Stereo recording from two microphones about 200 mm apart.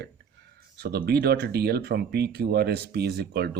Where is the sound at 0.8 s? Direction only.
55° right (ahead or behind).